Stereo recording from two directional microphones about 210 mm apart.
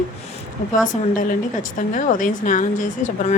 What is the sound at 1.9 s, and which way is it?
Speech, 40° left (ahead or behind).